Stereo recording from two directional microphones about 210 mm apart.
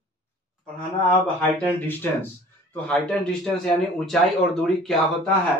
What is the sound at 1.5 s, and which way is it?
A man's voice, 10° left (ahead or behind).